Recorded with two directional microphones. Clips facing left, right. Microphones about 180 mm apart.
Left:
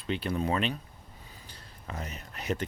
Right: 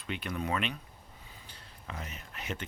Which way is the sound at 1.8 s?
40° left (ahead or behind).